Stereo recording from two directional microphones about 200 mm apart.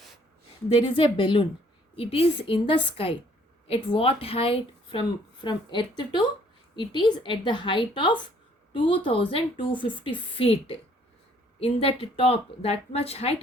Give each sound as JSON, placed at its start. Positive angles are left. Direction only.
{"t": 0.7, "sound": "a woman's voice", "side_deg": 25}